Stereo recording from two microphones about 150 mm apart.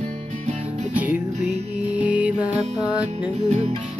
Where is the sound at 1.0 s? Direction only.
10° right (ahead or behind).